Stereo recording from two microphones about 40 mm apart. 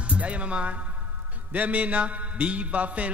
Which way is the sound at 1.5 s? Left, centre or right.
Right.